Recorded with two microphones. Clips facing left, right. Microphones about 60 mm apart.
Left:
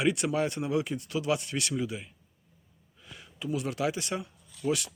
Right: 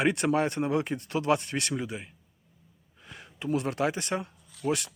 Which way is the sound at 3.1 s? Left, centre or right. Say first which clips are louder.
Right 3 dB; right.